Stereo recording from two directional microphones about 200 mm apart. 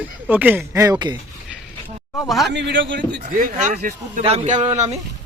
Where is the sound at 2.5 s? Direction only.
65° right (ahead or behind).